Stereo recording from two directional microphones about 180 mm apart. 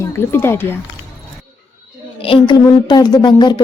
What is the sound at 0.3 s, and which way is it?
Speech, 10° left (ahead or behind).